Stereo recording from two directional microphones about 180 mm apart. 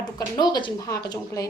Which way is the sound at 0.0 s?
25° left (ahead or behind).